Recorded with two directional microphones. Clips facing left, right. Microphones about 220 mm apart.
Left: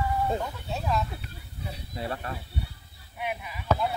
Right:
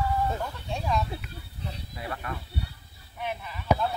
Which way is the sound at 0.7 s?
5° left (ahead or behind).